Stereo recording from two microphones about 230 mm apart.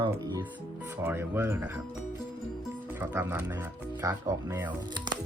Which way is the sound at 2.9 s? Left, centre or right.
Centre.